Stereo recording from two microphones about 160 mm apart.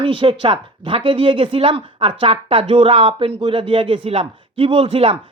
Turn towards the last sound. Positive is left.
turn(degrees=-35)  # may be behind; listen again after turning